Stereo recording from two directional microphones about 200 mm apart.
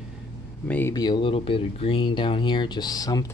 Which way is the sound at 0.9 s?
20° left (ahead or behind).